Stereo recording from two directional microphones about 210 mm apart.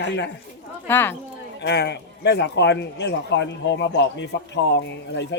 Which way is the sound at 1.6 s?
55° left (ahead or behind).